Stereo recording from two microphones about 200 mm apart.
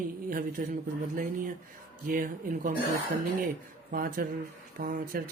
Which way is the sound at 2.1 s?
45° right (ahead or behind).